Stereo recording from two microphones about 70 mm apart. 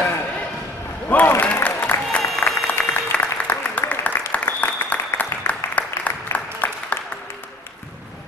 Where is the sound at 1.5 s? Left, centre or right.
Left.